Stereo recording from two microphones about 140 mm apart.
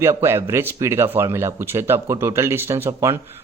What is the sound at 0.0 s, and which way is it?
Speech, 20° right (ahead or behind).